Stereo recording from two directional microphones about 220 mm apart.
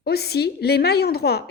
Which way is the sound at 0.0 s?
45° left (ahead or behind).